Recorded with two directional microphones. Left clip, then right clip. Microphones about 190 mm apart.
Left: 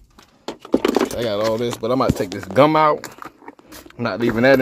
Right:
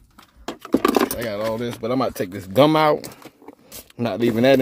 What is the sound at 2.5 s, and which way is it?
Speech, 15° right (ahead or behind).